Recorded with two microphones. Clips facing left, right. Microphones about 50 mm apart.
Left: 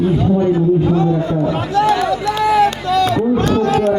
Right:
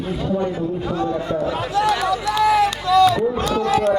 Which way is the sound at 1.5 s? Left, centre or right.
Left.